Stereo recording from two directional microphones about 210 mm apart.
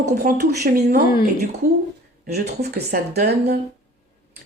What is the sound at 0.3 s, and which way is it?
Speech, 45° right (ahead or behind).